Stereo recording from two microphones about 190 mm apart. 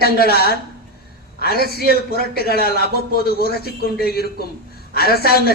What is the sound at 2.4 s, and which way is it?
A man's voice, 55° left (ahead or behind).